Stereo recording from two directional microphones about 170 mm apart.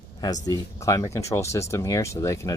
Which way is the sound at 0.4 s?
20° left (ahead or behind).